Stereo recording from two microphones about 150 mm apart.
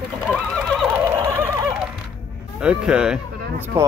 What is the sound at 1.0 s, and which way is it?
Neigh, 20° right (ahead or behind).